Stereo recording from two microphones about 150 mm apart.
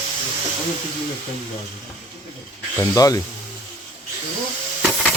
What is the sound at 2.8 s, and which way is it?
Speech, 20° left (ahead or behind).